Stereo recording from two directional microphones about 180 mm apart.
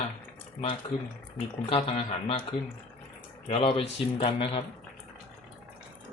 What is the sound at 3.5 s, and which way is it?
Speech, 30° left (ahead or behind).